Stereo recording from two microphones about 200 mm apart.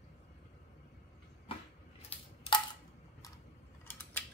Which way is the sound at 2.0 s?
30° left (ahead or behind).